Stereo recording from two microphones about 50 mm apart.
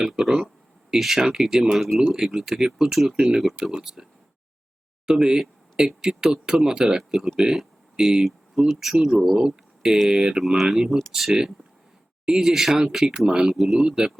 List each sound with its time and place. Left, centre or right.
0.0 s speech: centre
5.0 s speech: centre
7.5 s a sound: centre
8.2 s speech: centre
10.6 s speech: centre
13.4 s speech: centre